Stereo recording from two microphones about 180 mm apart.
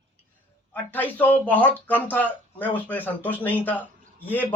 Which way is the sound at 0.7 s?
10° left (ahead or behind).